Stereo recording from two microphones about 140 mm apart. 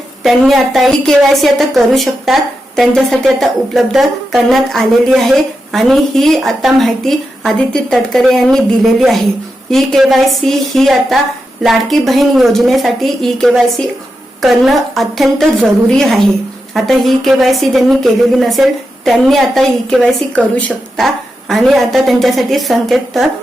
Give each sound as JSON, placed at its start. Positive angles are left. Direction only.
{"t": 0.2, "sound": "a woman's voice", "side_deg": 0}
{"t": 21.5, "sound": "a woman's voice", "side_deg": 0}